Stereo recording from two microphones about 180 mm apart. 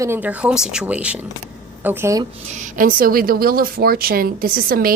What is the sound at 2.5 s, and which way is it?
A woman's voice, 45° right (ahead or behind).